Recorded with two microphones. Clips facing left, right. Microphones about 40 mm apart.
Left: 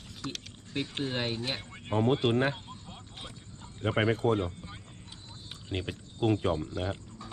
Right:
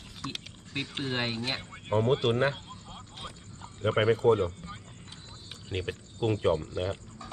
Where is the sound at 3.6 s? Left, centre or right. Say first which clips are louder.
Right 2 dB; centre.